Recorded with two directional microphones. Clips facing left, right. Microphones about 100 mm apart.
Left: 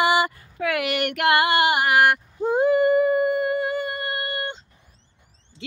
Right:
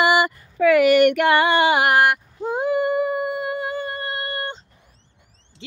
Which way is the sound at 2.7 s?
15° right (ahead or behind).